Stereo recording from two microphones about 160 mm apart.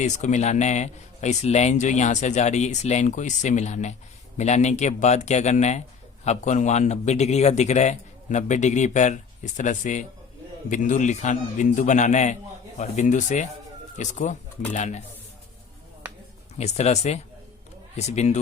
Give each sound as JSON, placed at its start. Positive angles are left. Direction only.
{"t": 0.0, "sound": "speech", "side_deg": 50}
{"t": 16.6, "sound": "speech", "side_deg": 45}